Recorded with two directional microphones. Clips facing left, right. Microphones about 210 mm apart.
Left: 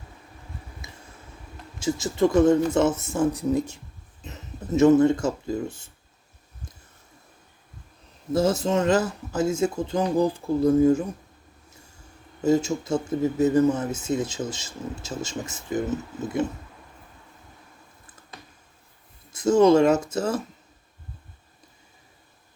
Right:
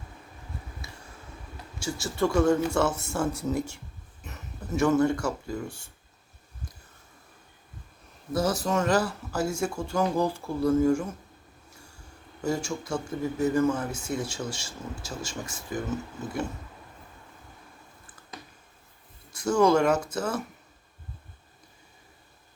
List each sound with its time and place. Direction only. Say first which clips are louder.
0.8 s a sound: even; 20° left (ahead or behind)
1.8 s speech: left 5 dB; 20° left (ahead or behind)
8.3 s speech: left 4 dB; 25° left (ahead or behind)
12.4 s speech: left 8 dB; 20° left (ahead or behind)
19.3 s speech: left 5 dB; 25° left (ahead or behind)